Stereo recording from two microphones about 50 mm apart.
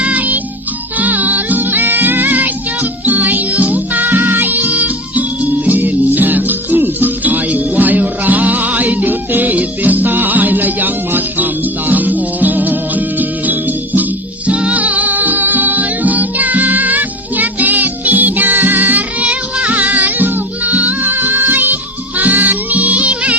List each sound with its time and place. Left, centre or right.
0.0 s music: right